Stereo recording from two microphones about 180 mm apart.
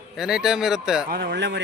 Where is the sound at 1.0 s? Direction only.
65° right (ahead or behind).